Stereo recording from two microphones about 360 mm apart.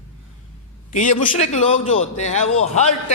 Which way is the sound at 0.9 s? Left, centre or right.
Left.